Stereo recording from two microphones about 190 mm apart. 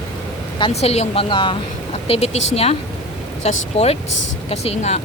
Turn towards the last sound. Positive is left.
turn(degrees=35)  # may be behind; listen again after turning